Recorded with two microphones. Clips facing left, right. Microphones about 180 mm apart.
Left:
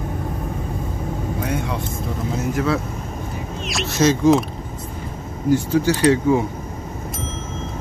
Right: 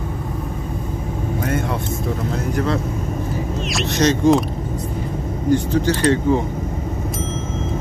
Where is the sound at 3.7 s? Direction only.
5° left (ahead or behind).